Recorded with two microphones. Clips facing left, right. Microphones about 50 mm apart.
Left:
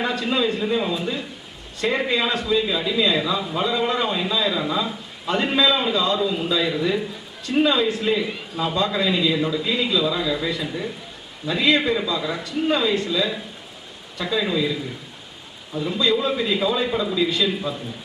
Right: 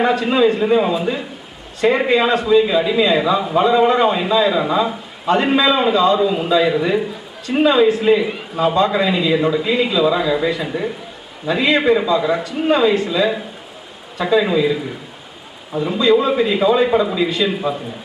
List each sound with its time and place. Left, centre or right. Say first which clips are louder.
0.0 s a man's voice: right 8 dB; right